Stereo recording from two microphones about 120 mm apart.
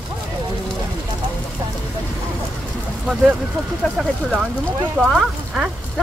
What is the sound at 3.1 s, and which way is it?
Speech, 10° right (ahead or behind).